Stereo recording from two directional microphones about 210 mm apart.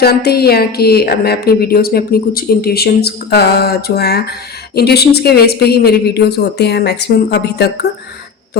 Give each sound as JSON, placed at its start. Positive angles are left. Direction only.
{"t": 0.0, "sound": "a woman's voice", "side_deg": 50}